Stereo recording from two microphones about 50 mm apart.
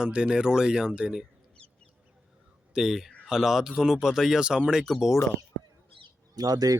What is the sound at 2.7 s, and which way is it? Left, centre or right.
A man's voice, centre.